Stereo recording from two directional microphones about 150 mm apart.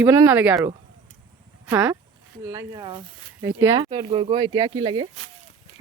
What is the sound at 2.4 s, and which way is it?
Speech, 20° right (ahead or behind).